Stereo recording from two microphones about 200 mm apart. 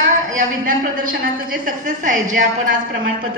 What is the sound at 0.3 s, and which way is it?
A woman's voice, 40° right (ahead or behind).